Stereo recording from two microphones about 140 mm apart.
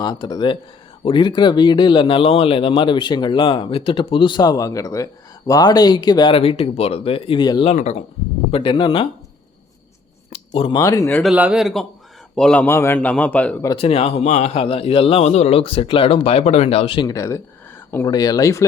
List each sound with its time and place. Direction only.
0.0 s speech: 30° left (ahead or behind)
7.6 s a man's voice: 50° left (ahead or behind)
8.4 s speech: 40° left (ahead or behind)
10.2 s a sound: 45° left (ahead or behind)
10.8 s speech: 25° left (ahead or behind)
11.2 s a man's voice: 5° right (ahead or behind)
13.7 s a man's voice: 45° left (ahead or behind); by 18.6 s 25° left (ahead or behind)